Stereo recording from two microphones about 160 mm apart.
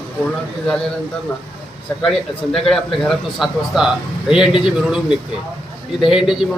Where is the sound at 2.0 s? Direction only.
5° left (ahead or behind).